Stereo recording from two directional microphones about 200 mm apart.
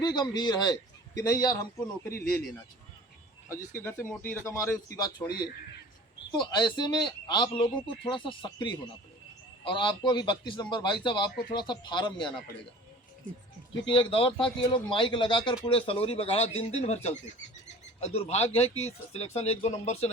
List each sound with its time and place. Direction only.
0.0 s a man's voice: 20° left (ahead or behind)
3.6 s speech: 40° left (ahead or behind)
3.8 s a man's voice: 10° left (ahead or behind)
6.3 s speech: 20° left (ahead or behind)
13.9 s speech: 25° left (ahead or behind)